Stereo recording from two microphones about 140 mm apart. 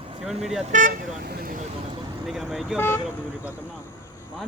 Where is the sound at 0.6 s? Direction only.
65° right (ahead or behind); by 1.6 s 90° right.